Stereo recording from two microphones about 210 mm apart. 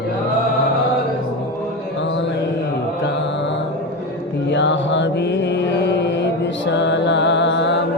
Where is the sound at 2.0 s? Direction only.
60° left (ahead or behind).